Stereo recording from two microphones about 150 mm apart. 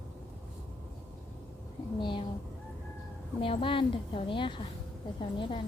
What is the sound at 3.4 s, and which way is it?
A woman's voice, 35° left (ahead or behind).